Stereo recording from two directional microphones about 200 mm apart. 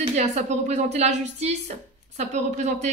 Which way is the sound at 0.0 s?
35° right (ahead or behind).